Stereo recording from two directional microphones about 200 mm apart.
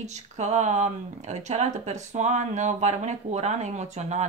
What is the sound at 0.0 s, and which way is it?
A woman's voice, 35° right (ahead or behind).